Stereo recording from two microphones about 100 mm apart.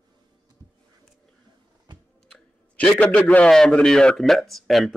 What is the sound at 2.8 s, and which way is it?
A man's voice, 15° left (ahead or behind).